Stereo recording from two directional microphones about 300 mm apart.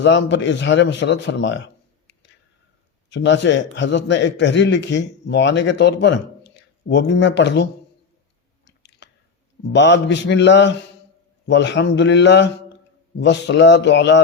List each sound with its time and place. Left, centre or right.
0.0 s a man's voice: left
8.6 s chewing: left
9.7 s a man's voice: left